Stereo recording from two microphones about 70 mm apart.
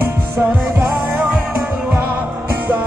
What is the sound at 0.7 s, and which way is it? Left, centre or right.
Music, centre.